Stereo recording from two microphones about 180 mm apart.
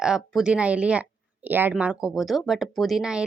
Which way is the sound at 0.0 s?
5° right (ahead or behind).